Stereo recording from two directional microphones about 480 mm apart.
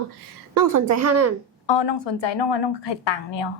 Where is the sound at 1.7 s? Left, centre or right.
Left.